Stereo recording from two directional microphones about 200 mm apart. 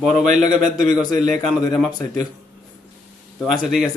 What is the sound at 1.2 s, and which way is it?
Speech, centre (ahead or behind).